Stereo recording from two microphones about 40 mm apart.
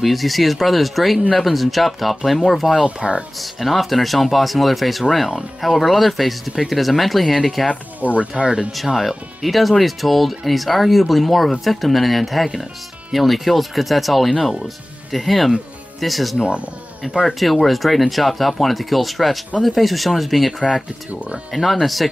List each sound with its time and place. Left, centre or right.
0.0 s speech: centre
2.7 s speech: centre
3.6 s speech: centre
8.0 s speech: right
8.7 s speech: centre
17.3 s speech: centre